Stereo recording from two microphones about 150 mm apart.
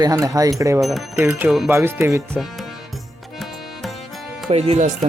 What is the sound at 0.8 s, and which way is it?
Speech, centre (ahead or behind).